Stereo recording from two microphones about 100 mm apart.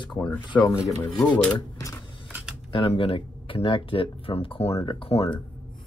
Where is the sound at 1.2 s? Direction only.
15° left (ahead or behind).